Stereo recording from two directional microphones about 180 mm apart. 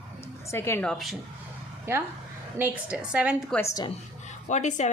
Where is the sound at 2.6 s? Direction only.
5° right (ahead or behind).